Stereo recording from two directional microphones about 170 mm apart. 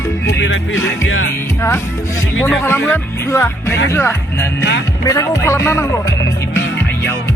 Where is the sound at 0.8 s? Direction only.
15° left (ahead or behind).